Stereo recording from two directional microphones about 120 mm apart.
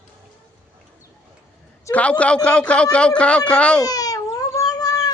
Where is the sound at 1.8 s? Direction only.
15° left (ahead or behind).